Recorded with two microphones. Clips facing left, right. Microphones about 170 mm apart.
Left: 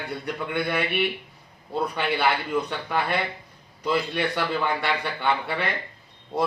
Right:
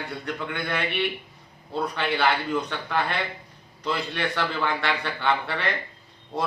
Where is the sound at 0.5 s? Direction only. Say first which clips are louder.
Left 4 dB; 10° left (ahead or behind).